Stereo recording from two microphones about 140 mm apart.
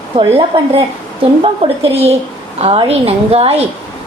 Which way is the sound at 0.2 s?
35° right (ahead or behind).